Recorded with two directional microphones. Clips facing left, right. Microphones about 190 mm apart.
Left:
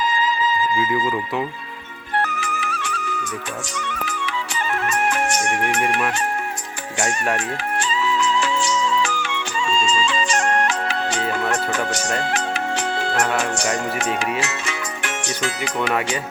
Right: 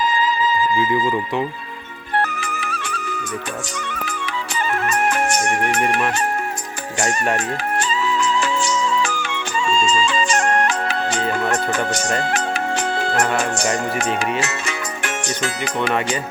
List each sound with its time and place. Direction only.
0.0 s music: 55° right (ahead or behind)
1.0 s speech: 5° left (ahead or behind)
2.6 s music: 35° right (ahead or behind)
4.9 s music: 40° right (ahead or behind)
7.3 s music: 45° right (ahead or behind)
11.9 s speech: 55° right (ahead or behind)
12.2 s music: 50° right (ahead or behind)
14.4 s music: 45° right (ahead or behind)
15.8 s speech: 5° left (ahead or behind)